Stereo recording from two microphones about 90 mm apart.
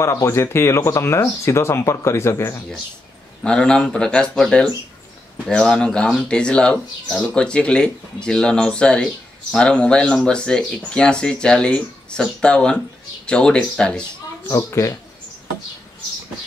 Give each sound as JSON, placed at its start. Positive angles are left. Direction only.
{"t": 0.0, "sound": "speech", "side_deg": 35}
{"t": 3.4, "sound": "speech", "side_deg": 10}
{"t": 14.6, "sound": "speech", "side_deg": 30}